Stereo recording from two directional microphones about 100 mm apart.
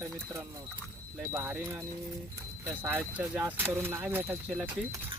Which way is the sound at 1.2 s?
25° right (ahead or behind).